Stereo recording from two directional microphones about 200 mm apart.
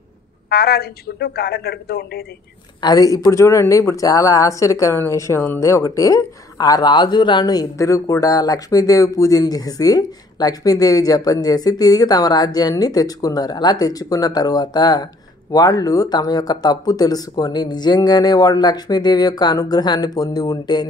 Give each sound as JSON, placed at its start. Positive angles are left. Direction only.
{"t": 0.5, "sound": "a man's voice", "side_deg": 50}
{"t": 2.8, "sound": "speech", "side_deg": 20}